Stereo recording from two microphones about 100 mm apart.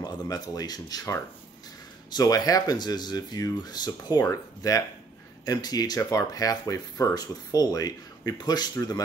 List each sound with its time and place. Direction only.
0.0 s speech: 40° left (ahead or behind)